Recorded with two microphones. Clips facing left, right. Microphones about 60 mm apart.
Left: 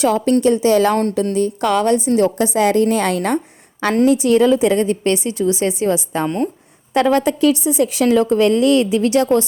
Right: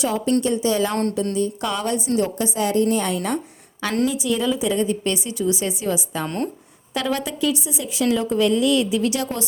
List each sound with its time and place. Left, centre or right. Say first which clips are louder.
0.0 s speech: left 6 dB; left
1.3 s a woman's voice: left 6 dB; left
2.2 s a woman's voice: left 7 dB; left
3.2 s a sound: left 6 dB; left
4.0 s a woman's voice: left 10 dB; left
6.2 s speech: left 6 dB; centre
6.9 s a woman's voice: left 10 dB; left
8.1 s a woman's voice: left 4 dB; left